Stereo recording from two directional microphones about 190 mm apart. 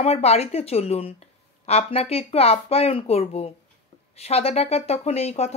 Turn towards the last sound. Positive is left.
turn(degrees=35)  # may be behind; listen again after turning